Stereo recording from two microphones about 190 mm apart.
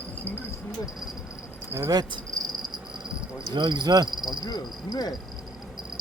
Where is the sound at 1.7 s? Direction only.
15° right (ahead or behind).